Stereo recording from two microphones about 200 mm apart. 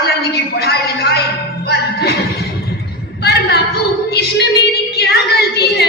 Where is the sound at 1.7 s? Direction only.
50° left (ahead or behind).